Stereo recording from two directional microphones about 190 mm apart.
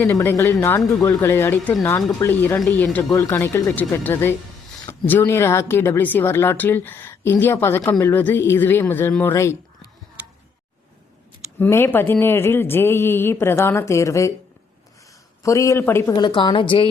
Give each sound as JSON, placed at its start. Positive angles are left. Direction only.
{"t": 0.0, "sound": "speech", "side_deg": 10}
{"t": 11.6, "sound": "speech", "side_deg": 10}
{"t": 15.4, "sound": "a woman's voice", "side_deg": 15}